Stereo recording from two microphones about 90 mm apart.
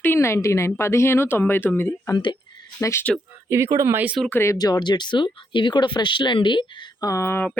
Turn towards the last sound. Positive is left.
turn(degrees=30)  # may be behind; listen again after turning